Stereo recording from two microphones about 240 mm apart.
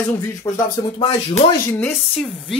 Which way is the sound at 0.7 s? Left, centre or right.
Left.